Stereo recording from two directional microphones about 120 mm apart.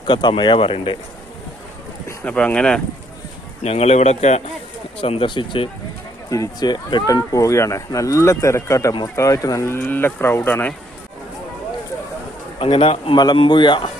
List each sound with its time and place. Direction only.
0.1 s speech: 40° left (ahead or behind)
2.0 s speech: 10° left (ahead or behind)
3.6 s speech: 60° left (ahead or behind)
4.9 s speech: 50° left (ahead or behind)
6.3 s speech: 30° left (ahead or behind); by 10.8 s 15° left (ahead or behind)
12.5 s speech: 45° left (ahead or behind)